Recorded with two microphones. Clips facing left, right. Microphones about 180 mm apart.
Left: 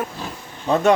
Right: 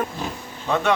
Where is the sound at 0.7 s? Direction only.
45° left (ahead or behind).